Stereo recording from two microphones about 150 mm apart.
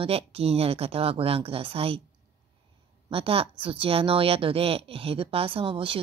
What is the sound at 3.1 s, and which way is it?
A woman's voice, 40° right (ahead or behind).